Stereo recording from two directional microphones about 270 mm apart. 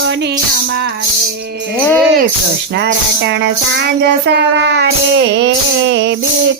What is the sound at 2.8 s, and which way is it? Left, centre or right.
Music, right.